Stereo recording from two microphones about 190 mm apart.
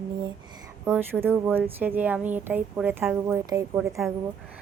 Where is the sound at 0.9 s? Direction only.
10° right (ahead or behind).